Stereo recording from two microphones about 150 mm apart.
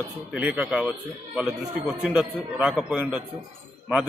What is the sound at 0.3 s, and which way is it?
A man's voice, 10° right (ahead or behind).